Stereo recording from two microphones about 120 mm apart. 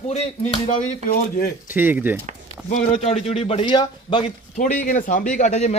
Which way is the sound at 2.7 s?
75° left (ahead or behind).